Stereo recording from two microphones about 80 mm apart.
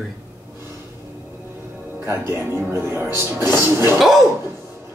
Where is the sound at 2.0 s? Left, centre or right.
Right.